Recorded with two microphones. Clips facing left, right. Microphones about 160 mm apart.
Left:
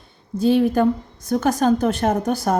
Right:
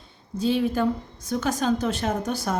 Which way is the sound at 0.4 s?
50° left (ahead or behind).